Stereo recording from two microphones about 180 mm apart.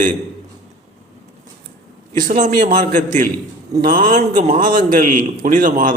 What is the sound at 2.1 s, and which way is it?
A man's voice, 45° right (ahead or behind).